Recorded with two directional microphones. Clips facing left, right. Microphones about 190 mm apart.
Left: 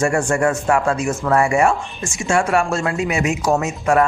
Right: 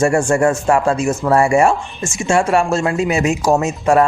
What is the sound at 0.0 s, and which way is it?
A man's voice, 25° right (ahead or behind).